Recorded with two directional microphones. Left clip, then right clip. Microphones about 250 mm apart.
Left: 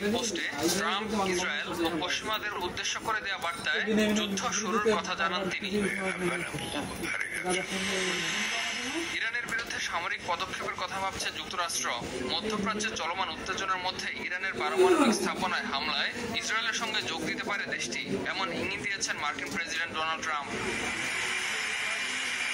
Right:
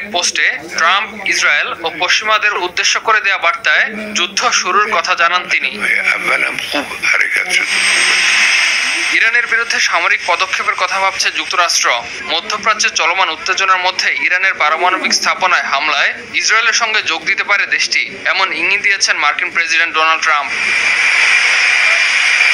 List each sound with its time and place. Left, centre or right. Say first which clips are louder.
0.1 s a man's voice: right 17 dB; right